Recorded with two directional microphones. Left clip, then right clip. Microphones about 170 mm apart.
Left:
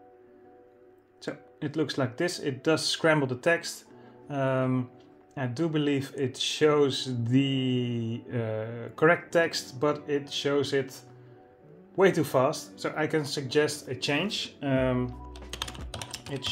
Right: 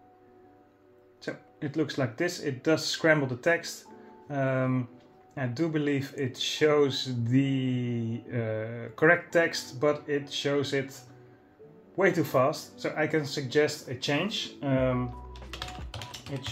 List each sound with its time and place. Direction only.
1.2 s speech: 25° left (ahead or behind)
12.0 s speech: 30° left (ahead or behind)